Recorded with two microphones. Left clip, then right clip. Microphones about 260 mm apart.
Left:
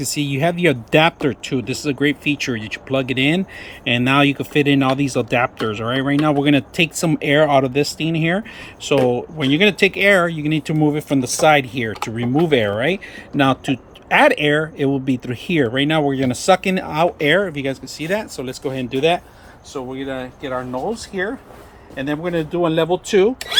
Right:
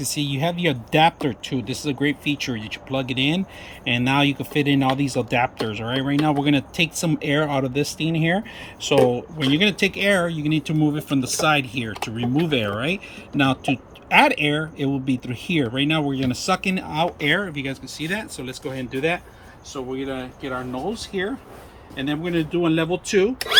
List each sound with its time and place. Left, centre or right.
0.0 s speech: centre
21.9 s speech: centre